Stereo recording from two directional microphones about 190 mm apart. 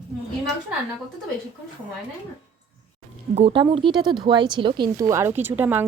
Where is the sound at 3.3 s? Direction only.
30° right (ahead or behind).